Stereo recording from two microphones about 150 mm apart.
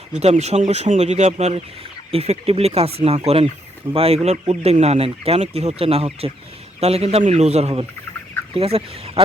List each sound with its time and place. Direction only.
0.1 s speech: 50° right (ahead or behind)
8.5 s fowl: 40° right (ahead or behind)